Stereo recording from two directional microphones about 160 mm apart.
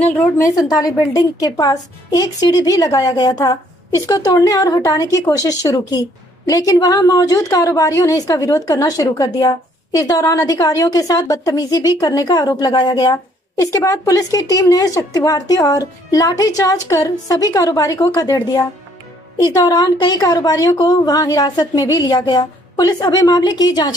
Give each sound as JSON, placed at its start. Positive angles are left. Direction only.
{"t": 0.0, "sound": "a woman's voice", "side_deg": 10}
{"t": 0.5, "sound": "a woman's voice", "side_deg": 25}